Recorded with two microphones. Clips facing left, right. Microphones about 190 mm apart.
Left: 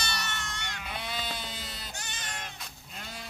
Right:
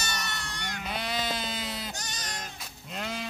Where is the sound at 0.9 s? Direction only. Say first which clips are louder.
Right 5 dB; 85° right.